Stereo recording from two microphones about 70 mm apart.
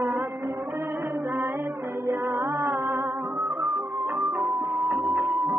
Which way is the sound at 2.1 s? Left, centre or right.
Right.